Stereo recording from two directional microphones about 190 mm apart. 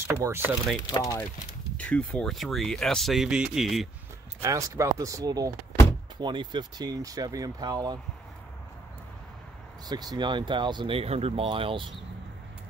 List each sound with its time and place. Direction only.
0.1 s speech: 10° right (ahead or behind)
0.8 s speech: 20° left (ahead or behind)
1.8 s speech: 5° left (ahead or behind)
4.4 s speech: 15° right (ahead or behind)
9.8 s speech: 20° right (ahead or behind)